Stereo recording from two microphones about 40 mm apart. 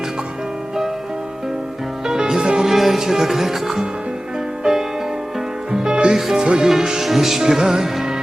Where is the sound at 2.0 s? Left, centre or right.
Centre.